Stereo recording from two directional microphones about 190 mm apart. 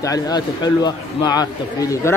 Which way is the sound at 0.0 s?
20° left (ahead or behind).